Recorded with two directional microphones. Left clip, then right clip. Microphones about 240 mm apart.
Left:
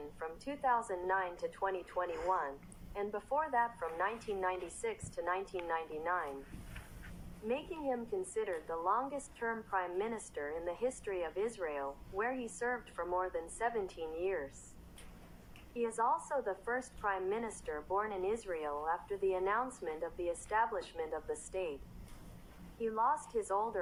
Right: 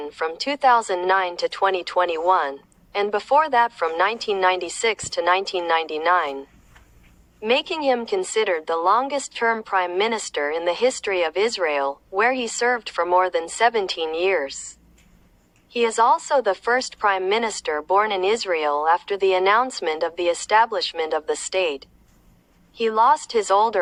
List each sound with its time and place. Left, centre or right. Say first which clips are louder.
0.0 s a woman's voice: right 18 dB; right
7.4 s a woman's voice: right 18 dB; right
15.7 s a woman's voice: right 16 dB; right
22.8 s a woman's voice: right 17 dB; right
23.5 s a woman's voice: right 19 dB; right